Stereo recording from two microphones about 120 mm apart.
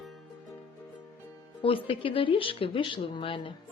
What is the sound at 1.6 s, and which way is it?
Speech, 50° left (ahead or behind).